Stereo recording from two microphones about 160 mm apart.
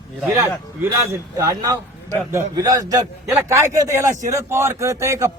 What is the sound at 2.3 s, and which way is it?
A man's voice, 20° right (ahead or behind).